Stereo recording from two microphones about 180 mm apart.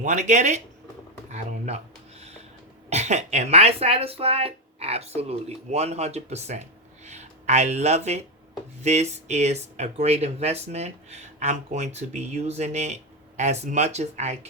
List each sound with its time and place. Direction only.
0.0 s speech: 45° right (ahead or behind)
1.3 s a sound: 35° right (ahead or behind)
2.9 s speech: 40° right (ahead or behind)